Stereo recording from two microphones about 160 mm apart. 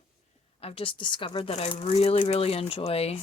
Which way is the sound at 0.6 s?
35° left (ahead or behind).